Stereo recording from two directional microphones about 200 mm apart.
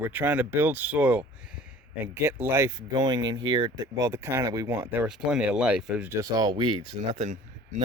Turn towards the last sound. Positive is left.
turn(degrees=-35)  # may be behind; listen again after turning